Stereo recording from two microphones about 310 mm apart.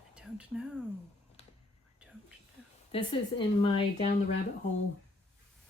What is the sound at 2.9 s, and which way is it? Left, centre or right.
Speech, centre.